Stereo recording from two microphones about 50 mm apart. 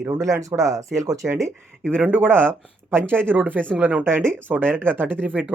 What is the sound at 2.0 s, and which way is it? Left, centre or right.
Speech, right.